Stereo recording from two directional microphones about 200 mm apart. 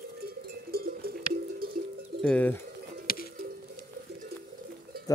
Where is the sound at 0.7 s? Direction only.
50° right (ahead or behind).